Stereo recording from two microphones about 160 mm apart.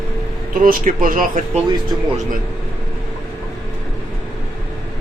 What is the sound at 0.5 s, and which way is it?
Speech, 60° right (ahead or behind).